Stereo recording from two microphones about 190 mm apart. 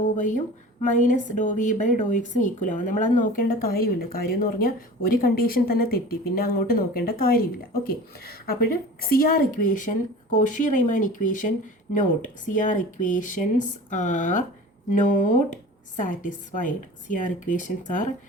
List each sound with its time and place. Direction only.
0.0 s a woman's voice: 40° left (ahead or behind)